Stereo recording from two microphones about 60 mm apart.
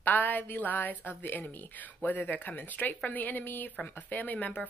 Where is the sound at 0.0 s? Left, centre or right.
Left.